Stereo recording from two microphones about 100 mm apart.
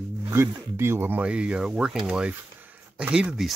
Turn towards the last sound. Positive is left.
turn(degrees=-10)  # may be behind; listen again after turning